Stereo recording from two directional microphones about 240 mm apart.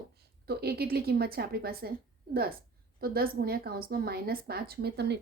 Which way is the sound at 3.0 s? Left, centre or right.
Right.